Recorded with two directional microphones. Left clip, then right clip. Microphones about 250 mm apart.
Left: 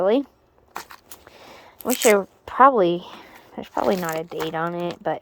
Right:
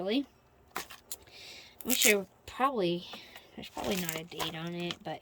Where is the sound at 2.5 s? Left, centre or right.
Left.